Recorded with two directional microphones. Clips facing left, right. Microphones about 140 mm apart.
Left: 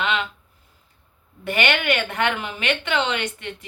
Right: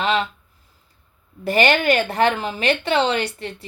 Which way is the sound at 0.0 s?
35° right (ahead or behind).